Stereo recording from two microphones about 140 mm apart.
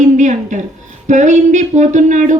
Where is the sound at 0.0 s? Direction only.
60° right (ahead or behind).